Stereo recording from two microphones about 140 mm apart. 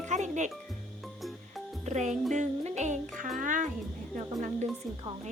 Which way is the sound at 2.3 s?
55° right (ahead or behind).